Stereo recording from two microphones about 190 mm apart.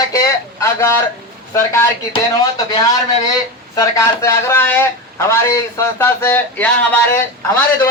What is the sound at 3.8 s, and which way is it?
Speech, 15° left (ahead or behind).